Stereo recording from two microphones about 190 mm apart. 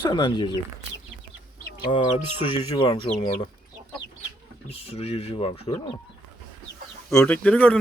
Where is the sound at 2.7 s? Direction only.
25° left (ahead or behind).